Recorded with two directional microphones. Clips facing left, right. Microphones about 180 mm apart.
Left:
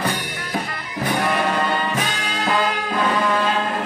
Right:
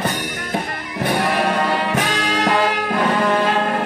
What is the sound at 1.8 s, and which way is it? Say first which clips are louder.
Brass instrument: right 4 dB; 70° right (ahead or behind).